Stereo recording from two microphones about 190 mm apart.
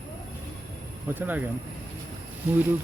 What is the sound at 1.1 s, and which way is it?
Speech, 10° right (ahead or behind).